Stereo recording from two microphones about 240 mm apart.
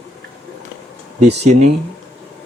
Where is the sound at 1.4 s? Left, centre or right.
Right.